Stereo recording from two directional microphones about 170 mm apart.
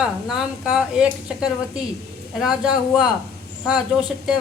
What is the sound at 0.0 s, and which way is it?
A woman's voice, 5° right (ahead or behind).